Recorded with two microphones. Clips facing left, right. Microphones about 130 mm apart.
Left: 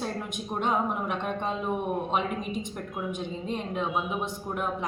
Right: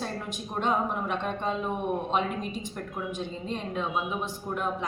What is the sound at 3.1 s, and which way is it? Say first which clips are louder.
Speech: left 1 dB; 10° left (ahead or behind).